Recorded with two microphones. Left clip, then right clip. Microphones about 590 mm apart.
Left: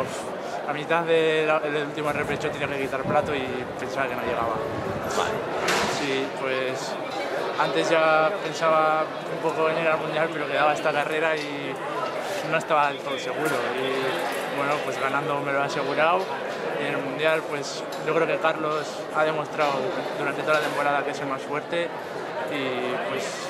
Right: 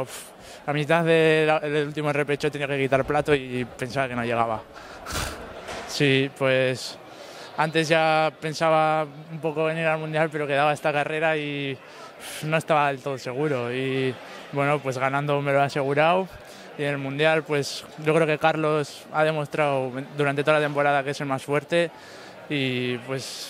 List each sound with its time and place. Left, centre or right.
0.7 s a man's voice: right
6.1 s a man's voice: right
7.7 s a man's voice: right
9.6 s a man's voice: right
12.4 s a man's voice: right
14.7 s a man's voice: right
17.2 s a man's voice: right